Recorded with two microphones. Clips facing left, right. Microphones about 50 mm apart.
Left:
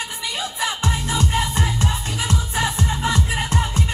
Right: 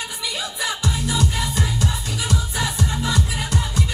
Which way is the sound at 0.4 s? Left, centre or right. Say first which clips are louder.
Left 2 dB; left.